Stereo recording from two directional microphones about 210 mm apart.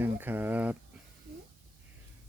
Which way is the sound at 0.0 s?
10° right (ahead or behind).